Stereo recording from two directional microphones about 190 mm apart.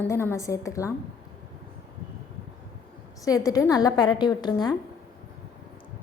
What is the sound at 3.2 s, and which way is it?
A woman's voice, 20° left (ahead or behind).